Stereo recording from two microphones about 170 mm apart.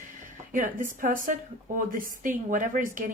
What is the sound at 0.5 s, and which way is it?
A woman's voice, 50° right (ahead or behind).